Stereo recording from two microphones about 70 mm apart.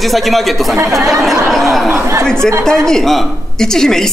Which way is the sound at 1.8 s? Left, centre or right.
Right.